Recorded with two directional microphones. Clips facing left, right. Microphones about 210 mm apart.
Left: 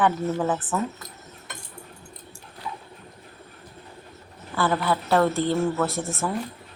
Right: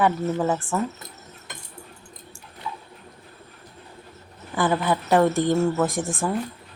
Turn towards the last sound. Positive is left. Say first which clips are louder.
# right 2 dB
turn(degrees=-15)  # may be behind; listen again after turning